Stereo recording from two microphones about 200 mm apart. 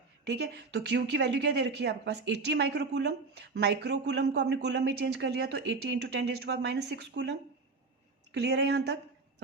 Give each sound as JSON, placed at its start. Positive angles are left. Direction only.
{"t": 0.3, "sound": "a woman's voice", "side_deg": -60}